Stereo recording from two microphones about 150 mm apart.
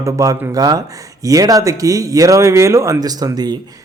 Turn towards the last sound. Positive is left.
turn(degrees=-25)  # may be behind; listen again after turning